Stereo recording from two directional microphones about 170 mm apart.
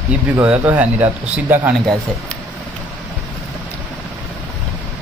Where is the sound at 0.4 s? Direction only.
10° right (ahead or behind).